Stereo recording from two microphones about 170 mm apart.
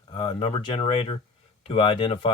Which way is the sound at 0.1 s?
30° left (ahead or behind).